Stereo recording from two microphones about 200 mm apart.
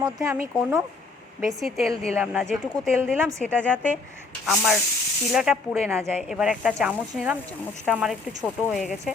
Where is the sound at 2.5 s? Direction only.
5° right (ahead or behind).